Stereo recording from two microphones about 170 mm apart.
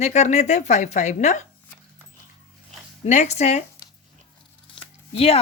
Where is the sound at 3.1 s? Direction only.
40° left (ahead or behind).